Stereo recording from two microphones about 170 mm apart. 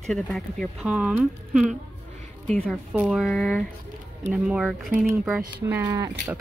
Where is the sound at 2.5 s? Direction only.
5° left (ahead or behind).